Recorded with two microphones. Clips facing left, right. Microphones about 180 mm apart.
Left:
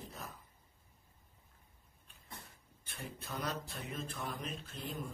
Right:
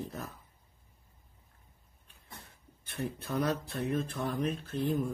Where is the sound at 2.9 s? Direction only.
65° right (ahead or behind).